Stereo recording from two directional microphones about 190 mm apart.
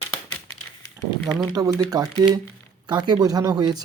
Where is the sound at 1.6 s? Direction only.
20° right (ahead or behind).